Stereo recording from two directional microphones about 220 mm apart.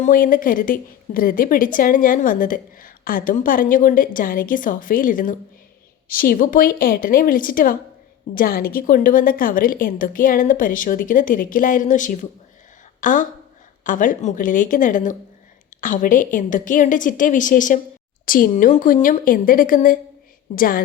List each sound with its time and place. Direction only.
0.0 s a woman's voice: 40° left (ahead or behind)